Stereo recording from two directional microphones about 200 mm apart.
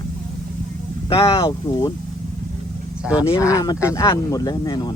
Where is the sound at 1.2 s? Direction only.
25° left (ahead or behind).